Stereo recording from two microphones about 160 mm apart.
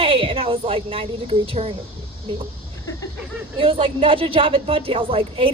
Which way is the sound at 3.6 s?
35° right (ahead or behind).